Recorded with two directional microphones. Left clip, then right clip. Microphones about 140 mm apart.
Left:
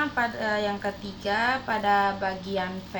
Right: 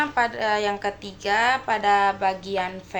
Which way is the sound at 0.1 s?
20° right (ahead or behind).